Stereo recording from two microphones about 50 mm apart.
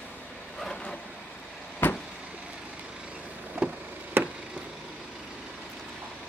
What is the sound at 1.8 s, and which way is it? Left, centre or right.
Vehicle, left.